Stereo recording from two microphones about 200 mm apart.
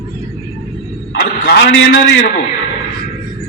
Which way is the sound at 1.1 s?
55° left (ahead or behind).